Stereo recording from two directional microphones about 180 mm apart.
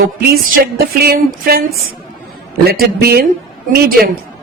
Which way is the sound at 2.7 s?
60° right (ahead or behind).